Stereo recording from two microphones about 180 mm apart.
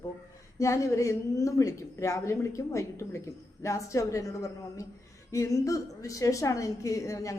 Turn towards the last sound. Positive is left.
turn(degrees=15)  # may be behind; listen again after turning